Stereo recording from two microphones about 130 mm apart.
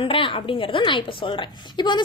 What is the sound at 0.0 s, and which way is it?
A woman's voice, 45° left (ahead or behind).